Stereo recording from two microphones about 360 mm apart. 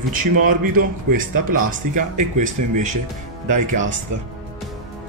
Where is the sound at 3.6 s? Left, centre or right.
Right.